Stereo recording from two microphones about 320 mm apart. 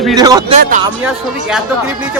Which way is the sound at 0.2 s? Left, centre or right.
Centre.